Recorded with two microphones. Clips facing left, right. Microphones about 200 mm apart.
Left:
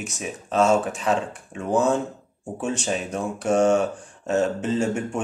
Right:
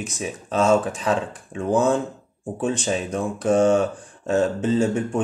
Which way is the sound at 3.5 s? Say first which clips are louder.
Right 1 dB; 35° right (ahead or behind).